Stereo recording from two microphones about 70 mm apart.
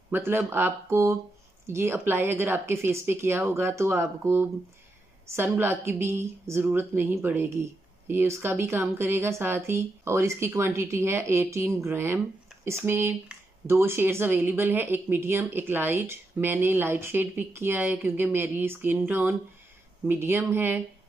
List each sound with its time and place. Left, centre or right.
0.1 s speech: right